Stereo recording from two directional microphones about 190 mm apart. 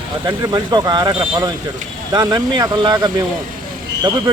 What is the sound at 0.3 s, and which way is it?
Speech, 20° right (ahead or behind).